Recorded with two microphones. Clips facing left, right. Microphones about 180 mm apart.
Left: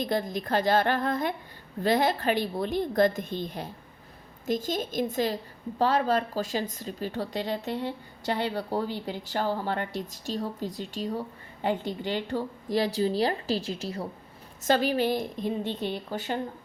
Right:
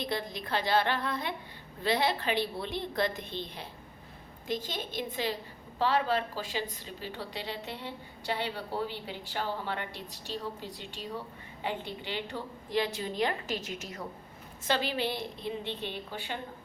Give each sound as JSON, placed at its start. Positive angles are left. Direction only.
{"t": 0.0, "sound": "a woman's voice", "side_deg": 45}
{"t": 14.6, "sound": "a woman's voice", "side_deg": 45}